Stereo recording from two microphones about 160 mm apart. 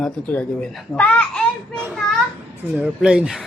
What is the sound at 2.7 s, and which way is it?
Speech, 5° right (ahead or behind).